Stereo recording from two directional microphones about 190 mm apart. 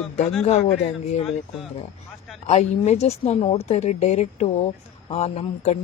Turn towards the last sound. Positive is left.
turn(degrees=35)  # may be behind; listen again after turning